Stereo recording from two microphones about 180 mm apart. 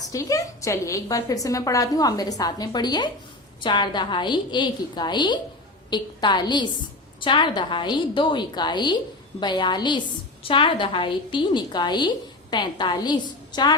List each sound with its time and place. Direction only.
0.1 s a woman's voice: 20° left (ahead or behind)